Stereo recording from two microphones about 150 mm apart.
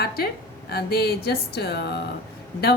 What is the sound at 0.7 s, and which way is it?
A woman's voice, 90° left.